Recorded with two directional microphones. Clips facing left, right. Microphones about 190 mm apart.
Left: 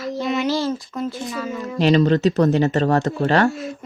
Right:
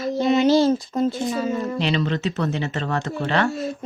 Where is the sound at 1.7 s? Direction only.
40° left (ahead or behind).